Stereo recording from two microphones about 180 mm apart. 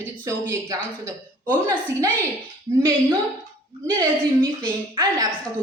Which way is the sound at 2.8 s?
20° right (ahead or behind).